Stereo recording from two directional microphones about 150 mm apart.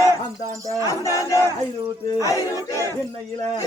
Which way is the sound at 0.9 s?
20° left (ahead or behind).